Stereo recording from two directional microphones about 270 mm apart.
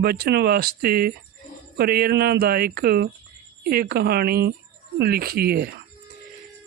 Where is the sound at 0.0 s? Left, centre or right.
Right.